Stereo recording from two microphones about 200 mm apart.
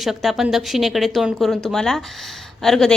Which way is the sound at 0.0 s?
Centre (ahead or behind).